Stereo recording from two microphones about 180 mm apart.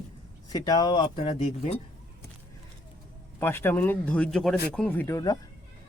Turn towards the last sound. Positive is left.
turn(degrees=10)  # may be behind; listen again after turning